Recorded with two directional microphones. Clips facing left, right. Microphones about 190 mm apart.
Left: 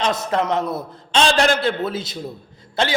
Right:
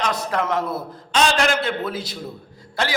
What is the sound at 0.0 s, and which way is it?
A man's voice, 25° left (ahead or behind).